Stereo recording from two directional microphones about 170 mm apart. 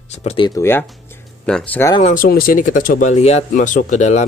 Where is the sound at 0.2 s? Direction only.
40° left (ahead or behind).